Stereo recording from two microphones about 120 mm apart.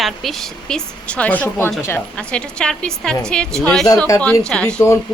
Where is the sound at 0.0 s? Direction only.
Centre (ahead or behind).